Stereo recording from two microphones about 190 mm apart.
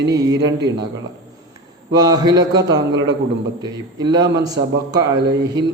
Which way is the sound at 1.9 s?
20° right (ahead or behind).